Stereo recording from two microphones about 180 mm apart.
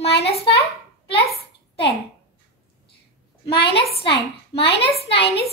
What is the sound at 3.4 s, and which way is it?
Speech, 30° left (ahead or behind).